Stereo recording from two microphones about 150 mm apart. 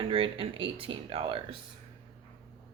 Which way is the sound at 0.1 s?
35° right (ahead or behind).